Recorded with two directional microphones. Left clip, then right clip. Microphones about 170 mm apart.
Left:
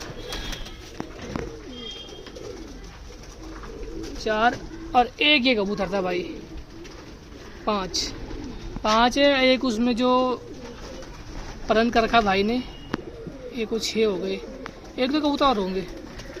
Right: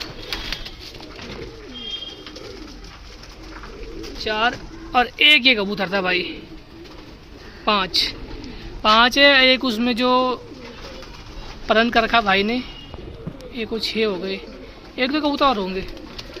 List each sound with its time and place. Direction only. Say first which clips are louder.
4.2 s speech: right 1 dB; 40° left (ahead or behind)
4.9 s speech: right 5 dB; 5° left (ahead or behind)
7.6 s speech: right 7 dB; 5° left (ahead or behind)
11.7 s speech: right 3 dB; 5° left (ahead or behind)